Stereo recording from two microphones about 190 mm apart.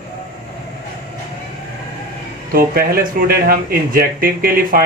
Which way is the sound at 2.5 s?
50° right (ahead or behind).